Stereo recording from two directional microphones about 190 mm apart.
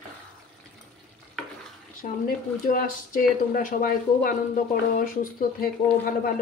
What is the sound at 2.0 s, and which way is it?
Speech, 45° left (ahead or behind).